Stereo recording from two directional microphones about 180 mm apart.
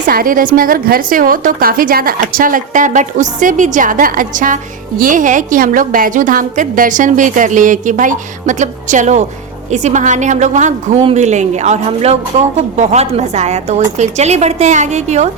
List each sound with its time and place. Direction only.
0.0 s a woman's voice: 50° right (ahead or behind)